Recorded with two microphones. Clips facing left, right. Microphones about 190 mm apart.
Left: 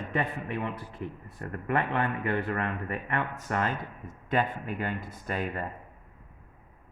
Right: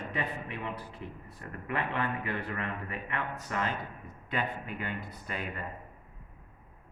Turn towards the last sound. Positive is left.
turn(degrees=45)  # may be behind; listen again after turning